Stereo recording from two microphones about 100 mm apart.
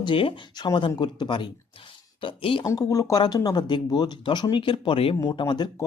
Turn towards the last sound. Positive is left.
turn(degrees=50)  # may be behind; listen again after turning